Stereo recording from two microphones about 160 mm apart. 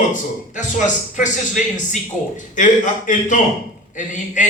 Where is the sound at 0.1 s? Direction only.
50° left (ahead or behind).